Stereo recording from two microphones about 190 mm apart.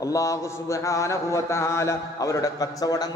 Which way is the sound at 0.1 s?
15° left (ahead or behind).